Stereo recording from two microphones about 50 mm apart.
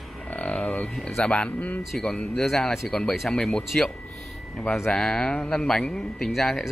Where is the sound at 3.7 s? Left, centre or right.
Left.